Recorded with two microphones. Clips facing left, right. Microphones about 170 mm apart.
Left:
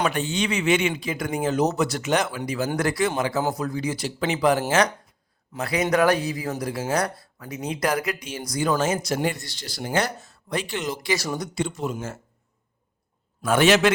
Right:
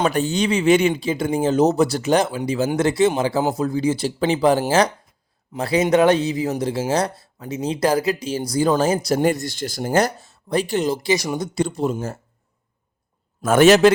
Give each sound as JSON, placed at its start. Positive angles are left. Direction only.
{"t": 0.1, "sound": "speech", "side_deg": -40}
{"t": 13.4, "sound": "a man's voice", "side_deg": -45}